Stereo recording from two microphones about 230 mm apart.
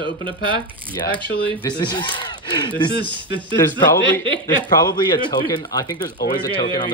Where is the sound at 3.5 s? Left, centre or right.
Centre.